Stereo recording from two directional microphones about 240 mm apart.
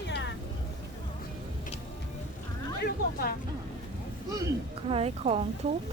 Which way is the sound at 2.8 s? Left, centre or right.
Left.